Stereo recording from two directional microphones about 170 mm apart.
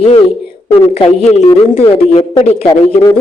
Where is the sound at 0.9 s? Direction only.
40° left (ahead or behind).